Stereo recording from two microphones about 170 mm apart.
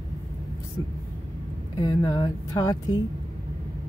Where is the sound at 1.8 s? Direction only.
25° left (ahead or behind).